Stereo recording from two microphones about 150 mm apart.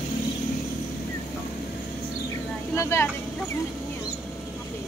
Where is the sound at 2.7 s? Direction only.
20° left (ahead or behind).